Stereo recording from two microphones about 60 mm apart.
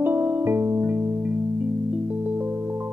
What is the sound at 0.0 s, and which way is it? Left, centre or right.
Music, right.